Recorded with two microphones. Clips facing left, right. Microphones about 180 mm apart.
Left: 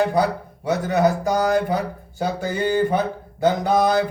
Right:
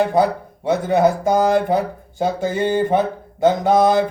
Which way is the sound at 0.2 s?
20° right (ahead or behind).